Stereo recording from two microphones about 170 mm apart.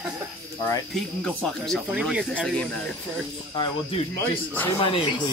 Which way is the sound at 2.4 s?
5° left (ahead or behind).